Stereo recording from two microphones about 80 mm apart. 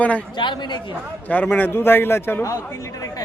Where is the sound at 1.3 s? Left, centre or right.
Left.